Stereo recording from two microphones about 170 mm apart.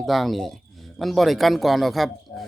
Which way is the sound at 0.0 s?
Centre (ahead or behind).